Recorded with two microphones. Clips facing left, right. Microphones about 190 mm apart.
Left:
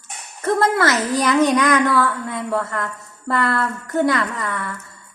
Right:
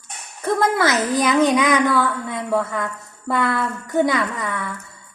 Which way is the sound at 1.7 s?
Centre (ahead or behind).